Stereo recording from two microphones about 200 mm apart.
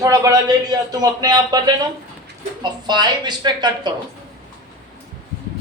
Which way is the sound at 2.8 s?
20° right (ahead or behind).